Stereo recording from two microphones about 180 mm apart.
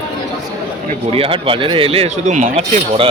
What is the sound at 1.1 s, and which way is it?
Speech, 30° right (ahead or behind).